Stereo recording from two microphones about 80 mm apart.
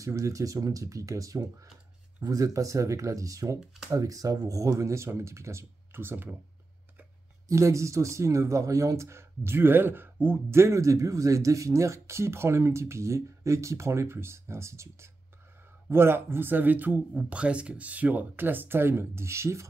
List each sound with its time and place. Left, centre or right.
0.0 s speech: right
7.4 s speech: right